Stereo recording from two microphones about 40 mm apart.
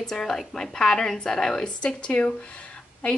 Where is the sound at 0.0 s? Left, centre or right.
Centre.